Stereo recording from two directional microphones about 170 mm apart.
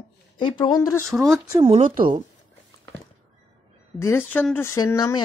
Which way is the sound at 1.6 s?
30° right (ahead or behind).